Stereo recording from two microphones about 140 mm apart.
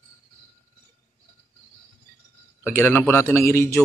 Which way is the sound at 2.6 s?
15° left (ahead or behind).